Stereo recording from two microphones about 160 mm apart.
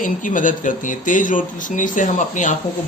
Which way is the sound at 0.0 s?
55° left (ahead or behind).